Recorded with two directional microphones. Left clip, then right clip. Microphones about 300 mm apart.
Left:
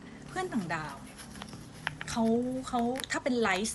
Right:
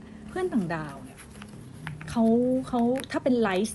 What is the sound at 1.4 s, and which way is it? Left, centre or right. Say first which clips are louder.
Music: even; centre.